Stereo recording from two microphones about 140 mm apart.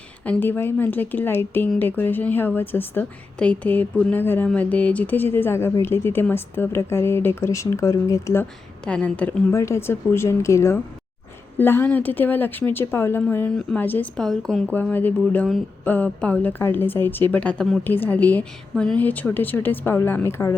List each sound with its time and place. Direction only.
0.3 s a woman's voice: 15° left (ahead or behind)
8.8 s a woman's voice: 10° left (ahead or behind)
9.5 s a woman's voice: 20° left (ahead or behind)